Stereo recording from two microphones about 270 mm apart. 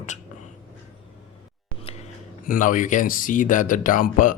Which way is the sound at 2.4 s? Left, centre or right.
Left.